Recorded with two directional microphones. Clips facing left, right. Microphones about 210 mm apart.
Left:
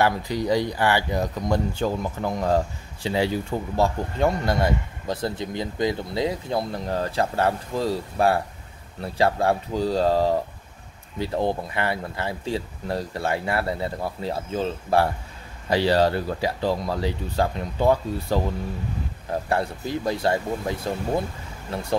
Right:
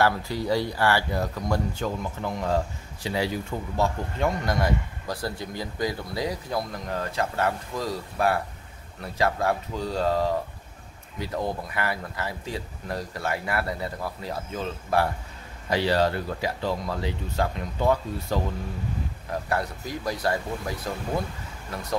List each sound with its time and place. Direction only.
0.0 s speech: 15° left (ahead or behind)
2.2 s speech: 40° left (ahead or behind)
3.1 s speech: 25° left (ahead or behind)
19.5 s speech: 30° left (ahead or behind)